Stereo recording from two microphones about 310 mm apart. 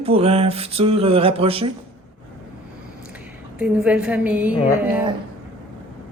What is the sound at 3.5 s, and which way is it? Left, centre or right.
A woman's voice, centre.